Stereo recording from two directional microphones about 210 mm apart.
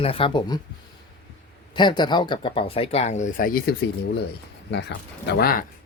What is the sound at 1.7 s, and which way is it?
Speech, 20° left (ahead or behind).